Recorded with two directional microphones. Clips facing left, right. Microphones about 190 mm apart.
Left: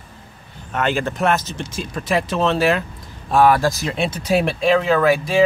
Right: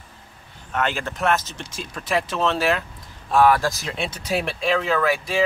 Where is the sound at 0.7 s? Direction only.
10° left (ahead or behind).